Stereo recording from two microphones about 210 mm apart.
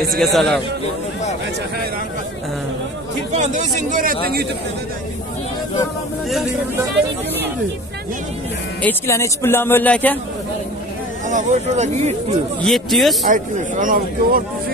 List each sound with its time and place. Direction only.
0.1 s speech: centre (ahead or behind)
3.3 s speech: 35° right (ahead or behind)
8.8 s speech: 15° left (ahead or behind)
11.2 s speech: 35° right (ahead or behind)
12.6 s speech: centre (ahead or behind)
13.2 s speech: 40° right (ahead or behind)